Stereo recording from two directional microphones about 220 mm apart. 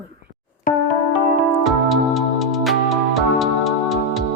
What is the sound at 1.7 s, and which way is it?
Music, centre (ahead or behind).